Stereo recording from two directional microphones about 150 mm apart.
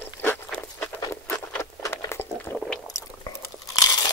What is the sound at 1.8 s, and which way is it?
Patter, 20° left (ahead or behind).